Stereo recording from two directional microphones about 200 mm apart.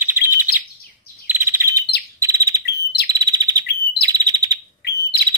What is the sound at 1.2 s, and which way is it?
Bird, 10° right (ahead or behind).